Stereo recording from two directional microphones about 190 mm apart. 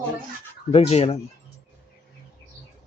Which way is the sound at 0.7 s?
30° left (ahead or behind).